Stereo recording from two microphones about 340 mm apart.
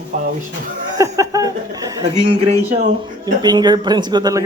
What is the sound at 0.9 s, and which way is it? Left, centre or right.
Speech, centre.